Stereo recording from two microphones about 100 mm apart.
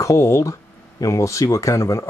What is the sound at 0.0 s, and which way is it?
Speech, 30° left (ahead or behind).